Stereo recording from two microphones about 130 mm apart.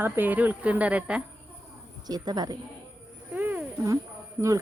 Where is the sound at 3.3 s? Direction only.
15° right (ahead or behind).